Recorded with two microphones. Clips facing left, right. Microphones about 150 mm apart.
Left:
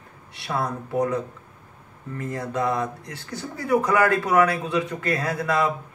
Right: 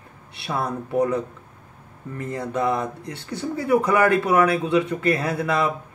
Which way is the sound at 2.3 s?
25° right (ahead or behind).